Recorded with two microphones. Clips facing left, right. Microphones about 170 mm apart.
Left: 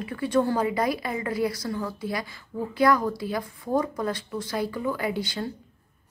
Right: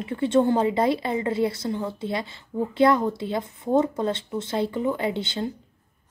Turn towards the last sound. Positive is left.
turn(degrees=-25)  # may be behind; listen again after turning